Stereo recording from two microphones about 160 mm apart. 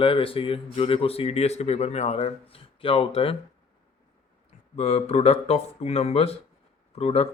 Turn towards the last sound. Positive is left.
turn(degrees=40)  # may be behind; listen again after turning